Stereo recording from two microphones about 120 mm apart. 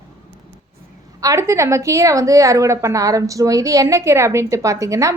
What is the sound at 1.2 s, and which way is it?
A woman's voice, 25° right (ahead or behind).